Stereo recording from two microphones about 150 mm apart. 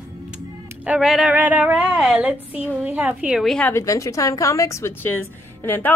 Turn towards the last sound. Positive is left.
turn(degrees=15)  # may be behind; listen again after turning